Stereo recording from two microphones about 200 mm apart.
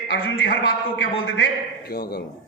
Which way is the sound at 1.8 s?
50° left (ahead or behind).